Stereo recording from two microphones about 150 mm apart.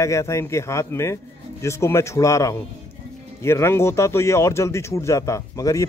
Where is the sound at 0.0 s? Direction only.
20° left (ahead or behind).